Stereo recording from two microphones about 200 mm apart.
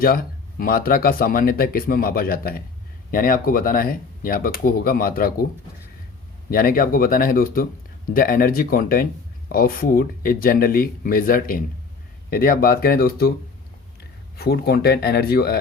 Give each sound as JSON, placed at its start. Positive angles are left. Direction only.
{"t": 0.0, "sound": "speech", "side_deg": 45}
{"t": 6.5, "sound": "speech", "side_deg": 45}
{"t": 14.3, "sound": "speech", "side_deg": 50}